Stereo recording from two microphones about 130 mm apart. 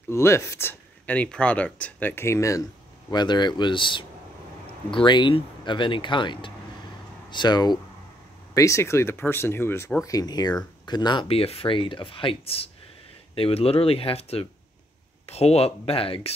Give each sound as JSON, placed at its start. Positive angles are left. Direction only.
{"t": 0.1, "sound": "speech", "side_deg": 20}
{"t": 3.1, "sound": "speech", "side_deg": 35}
{"t": 8.5, "sound": "speech", "side_deg": 25}
{"t": 10.0, "sound": "speech", "side_deg": 30}